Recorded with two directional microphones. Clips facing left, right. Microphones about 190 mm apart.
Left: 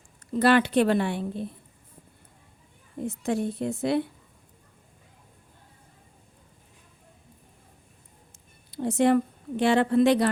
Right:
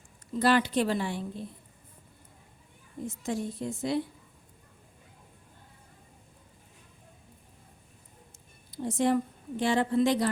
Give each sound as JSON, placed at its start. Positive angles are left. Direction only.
{"t": 0.3, "sound": "a woman's voice", "side_deg": 65}
{"t": 3.1, "sound": "a woman's voice", "side_deg": 65}
{"t": 8.7, "sound": "a woman's voice", "side_deg": 65}